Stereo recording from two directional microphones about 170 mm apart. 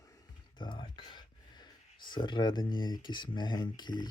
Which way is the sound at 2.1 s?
25° left (ahead or behind).